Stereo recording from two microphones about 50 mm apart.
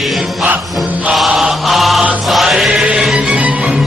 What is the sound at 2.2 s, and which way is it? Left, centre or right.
Music, centre.